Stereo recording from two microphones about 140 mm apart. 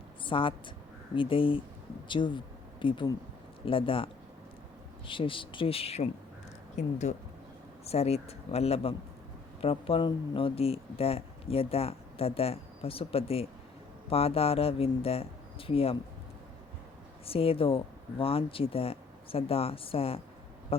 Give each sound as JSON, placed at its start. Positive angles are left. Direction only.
{"t": 0.3, "sound": "speech", "side_deg": 40}
{"t": 17.2, "sound": "speech", "side_deg": 45}